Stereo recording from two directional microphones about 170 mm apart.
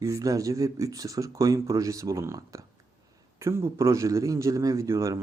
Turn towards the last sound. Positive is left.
turn(degrees=-15)  # may be behind; listen again after turning